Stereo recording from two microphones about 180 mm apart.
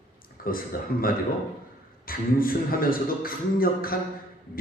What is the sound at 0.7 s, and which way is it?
Speech, 55° left (ahead or behind).